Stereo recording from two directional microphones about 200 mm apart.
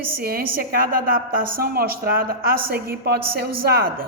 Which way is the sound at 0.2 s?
50° right (ahead or behind).